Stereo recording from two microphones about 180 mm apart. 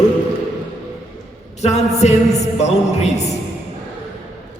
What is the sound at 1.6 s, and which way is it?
A man's voice, 40° left (ahead or behind).